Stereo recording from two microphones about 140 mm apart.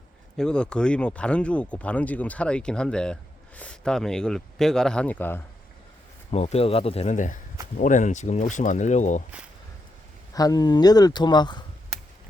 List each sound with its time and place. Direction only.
0.3 s speech: 5° left (ahead or behind)
6.3 s speech: 50° left (ahead or behind)
7.1 s speech: 65° left (ahead or behind)
10.3 s speech: 25° left (ahead or behind)